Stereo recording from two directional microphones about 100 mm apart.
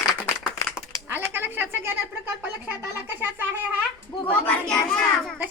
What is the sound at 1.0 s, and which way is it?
Speech, 20° right (ahead or behind).